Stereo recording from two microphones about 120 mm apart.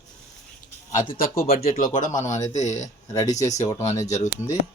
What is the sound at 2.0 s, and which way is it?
Speech, 90° left.